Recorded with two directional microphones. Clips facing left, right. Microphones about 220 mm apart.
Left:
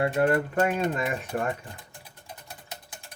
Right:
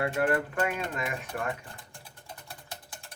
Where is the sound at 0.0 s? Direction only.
25° left (ahead or behind).